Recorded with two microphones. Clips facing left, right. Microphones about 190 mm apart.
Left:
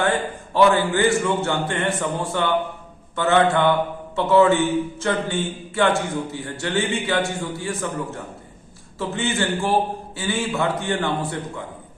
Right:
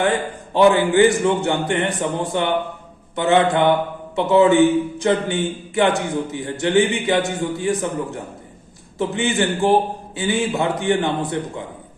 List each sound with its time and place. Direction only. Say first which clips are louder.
0.0 s a man's voice: right 2 dB; 20° right (ahead or behind)